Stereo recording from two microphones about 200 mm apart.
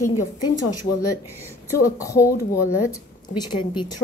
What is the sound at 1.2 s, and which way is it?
Speech, 10° right (ahead or behind).